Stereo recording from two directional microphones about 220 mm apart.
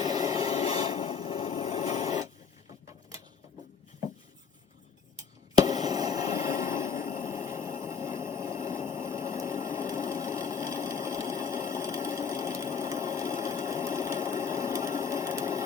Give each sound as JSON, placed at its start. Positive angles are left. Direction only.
{"t": 0.0, "sound": "rub", "side_deg": -15}
{"t": 0.5, "sound": "rub", "side_deg": 25}
{"t": 5.1, "sound": "a sound", "side_deg": -15}